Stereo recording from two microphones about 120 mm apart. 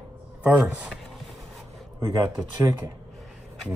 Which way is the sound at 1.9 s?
25° right (ahead or behind).